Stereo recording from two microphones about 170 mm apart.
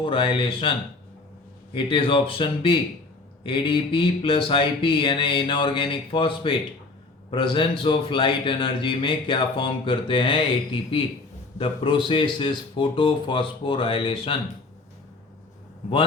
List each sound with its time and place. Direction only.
0.0 s speech: 30° left (ahead or behind)
1.7 s speech: 30° left (ahead or behind)